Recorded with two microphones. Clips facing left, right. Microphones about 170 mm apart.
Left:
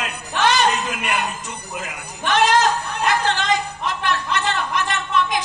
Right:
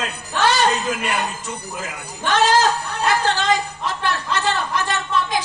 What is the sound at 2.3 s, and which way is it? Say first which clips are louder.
Speech: even; 30° right (ahead or behind).